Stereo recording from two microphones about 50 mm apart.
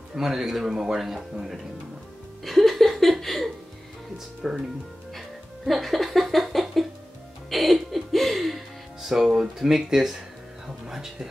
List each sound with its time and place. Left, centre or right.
0.1 s speech: centre
2.4 s a sound: centre
4.4 s speech: centre
5.7 s laughter: centre
7.4 s music: centre
10.9 s speech: centre